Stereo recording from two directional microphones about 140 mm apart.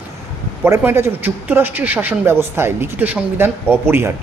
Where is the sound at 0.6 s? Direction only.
15° right (ahead or behind).